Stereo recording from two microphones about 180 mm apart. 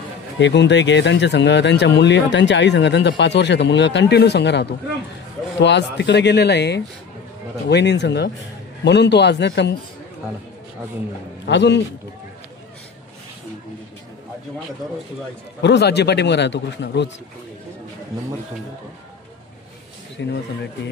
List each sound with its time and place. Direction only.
0.4 s speech: 80° left
11.4 s speech: 75° left (ahead or behind)
15.6 s speech: 70° left (ahead or behind)
20.2 s speech: 75° left (ahead or behind)